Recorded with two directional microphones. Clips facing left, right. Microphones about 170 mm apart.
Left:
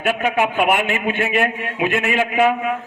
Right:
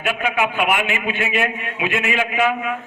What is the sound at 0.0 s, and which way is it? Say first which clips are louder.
A man's voice: left 2 dB; 45° left (ahead or behind).